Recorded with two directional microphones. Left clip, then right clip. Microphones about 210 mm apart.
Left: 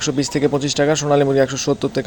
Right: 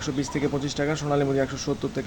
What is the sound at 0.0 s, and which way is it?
A man's voice, 35° left (ahead or behind).